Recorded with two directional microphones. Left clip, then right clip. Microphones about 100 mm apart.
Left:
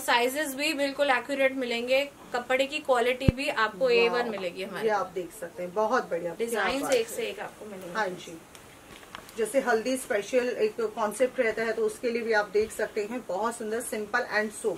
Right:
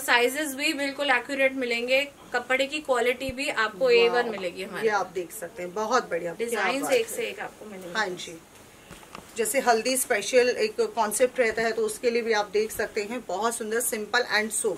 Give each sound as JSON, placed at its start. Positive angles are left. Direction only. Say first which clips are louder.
{"t": 0.0, "sound": "a woman's voice", "louder": "right 2 dB", "side_deg": 0}
{"t": 4.8, "sound": "a woman's voice", "louder": "right 2 dB", "side_deg": -20}
{"t": 6.3, "sound": "a woman's voice", "louder": "right 2 dB", "side_deg": 5}
{"t": 9.5, "sound": "a woman's voice", "louder": "right 3 dB", "side_deg": -25}